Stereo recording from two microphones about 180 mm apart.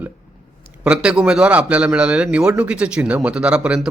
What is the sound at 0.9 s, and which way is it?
Speech, 5° right (ahead or behind).